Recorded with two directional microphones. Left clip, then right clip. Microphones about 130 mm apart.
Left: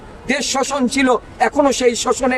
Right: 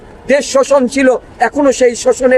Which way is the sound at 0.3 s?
25° left (ahead or behind).